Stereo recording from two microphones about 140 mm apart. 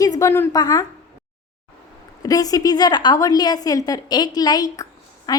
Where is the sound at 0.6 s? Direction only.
30° left (ahead or behind).